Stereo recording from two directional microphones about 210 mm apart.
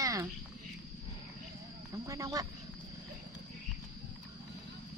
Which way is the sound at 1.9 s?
15° right (ahead or behind).